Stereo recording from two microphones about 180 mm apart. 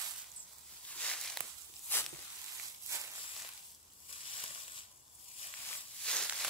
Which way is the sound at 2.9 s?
15° right (ahead or behind).